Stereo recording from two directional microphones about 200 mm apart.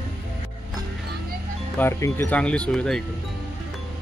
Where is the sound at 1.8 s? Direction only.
15° left (ahead or behind).